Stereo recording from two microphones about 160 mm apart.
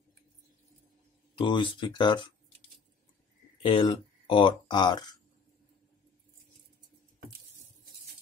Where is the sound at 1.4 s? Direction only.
30° left (ahead or behind).